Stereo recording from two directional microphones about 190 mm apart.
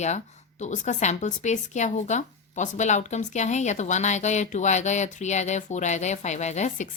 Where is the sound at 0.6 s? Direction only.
40° left (ahead or behind).